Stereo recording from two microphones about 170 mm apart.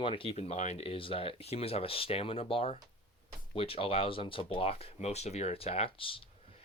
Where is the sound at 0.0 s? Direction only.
30° left (ahead or behind).